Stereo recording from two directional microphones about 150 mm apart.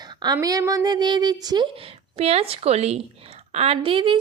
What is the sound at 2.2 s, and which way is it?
A woman's voice, 45° right (ahead or behind).